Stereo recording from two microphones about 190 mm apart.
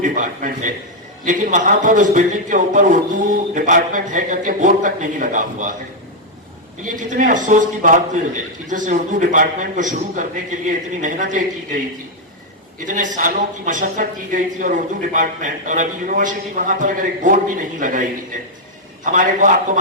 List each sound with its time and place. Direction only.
0.0 s speech: 45° right (ahead or behind)
6.9 s a woman's voice: 40° right (ahead or behind)
12.8 s speech: 40° right (ahead or behind)